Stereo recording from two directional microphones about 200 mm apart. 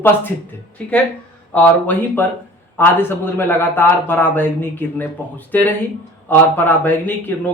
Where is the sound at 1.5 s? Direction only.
10° left (ahead or behind).